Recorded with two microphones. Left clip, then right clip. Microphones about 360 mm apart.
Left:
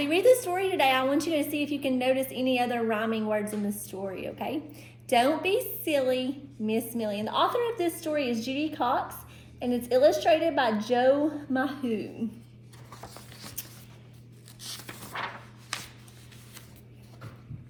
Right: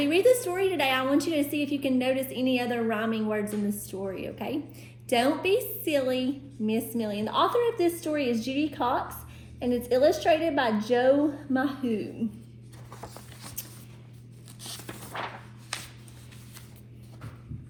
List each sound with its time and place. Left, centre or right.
0.0 s a woman's voice: centre
3.4 s a woman's voice: centre
3.8 s a woman's voice: centre
12.9 s a sound: centre
14.6 s walk: centre